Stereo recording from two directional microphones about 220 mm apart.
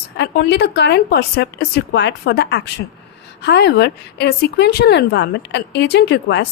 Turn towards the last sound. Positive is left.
turn(degrees=50)  # may be behind; listen again after turning